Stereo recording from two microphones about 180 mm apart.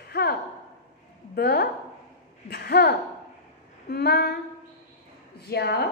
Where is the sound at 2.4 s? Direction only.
65° left (ahead or behind).